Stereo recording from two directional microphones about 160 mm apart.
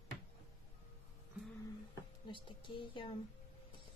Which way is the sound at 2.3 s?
30° left (ahead or behind).